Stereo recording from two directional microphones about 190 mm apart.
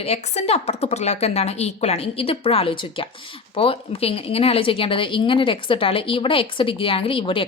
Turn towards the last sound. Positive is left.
turn(degrees=30)  # may be behind; listen again after turning